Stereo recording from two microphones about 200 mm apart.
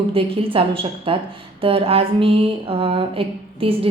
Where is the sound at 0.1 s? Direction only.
25° right (ahead or behind).